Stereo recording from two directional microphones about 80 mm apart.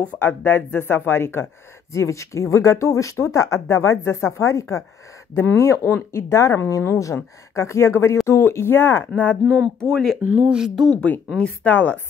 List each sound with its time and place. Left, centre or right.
0.2 s speech: left
10.2 s speech: right
10.5 s speech: centre
10.9 s speech: centre